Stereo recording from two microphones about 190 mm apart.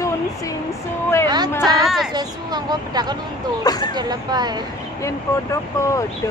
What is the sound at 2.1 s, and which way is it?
Speech, 20° right (ahead or behind).